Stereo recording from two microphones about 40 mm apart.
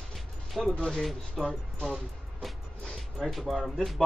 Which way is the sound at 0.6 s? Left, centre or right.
Centre.